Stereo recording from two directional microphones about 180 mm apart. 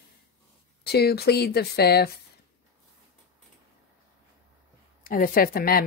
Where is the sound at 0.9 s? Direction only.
65° left (ahead or behind).